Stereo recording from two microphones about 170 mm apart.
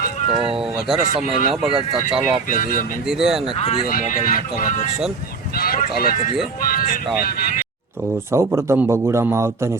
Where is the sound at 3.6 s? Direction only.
40° left (ahead or behind).